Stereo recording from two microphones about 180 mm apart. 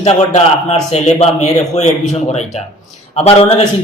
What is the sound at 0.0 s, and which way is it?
A man's voice, 35° left (ahead or behind).